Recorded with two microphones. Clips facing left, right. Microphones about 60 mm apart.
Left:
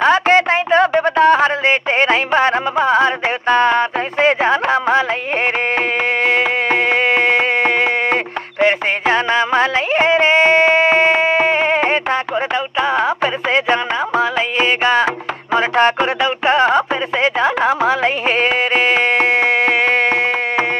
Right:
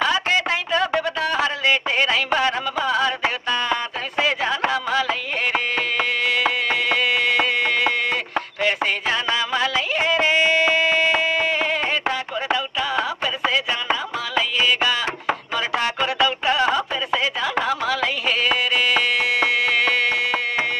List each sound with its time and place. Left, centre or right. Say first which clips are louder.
0.0 s speech: left 8 dB; left
6.2 s insect: left 7 dB; left
12.8 s music: left 10 dB; left
16.2 s a sound: left 3 dB; left